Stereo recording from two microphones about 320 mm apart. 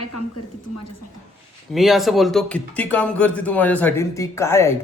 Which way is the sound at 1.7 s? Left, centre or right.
Centre.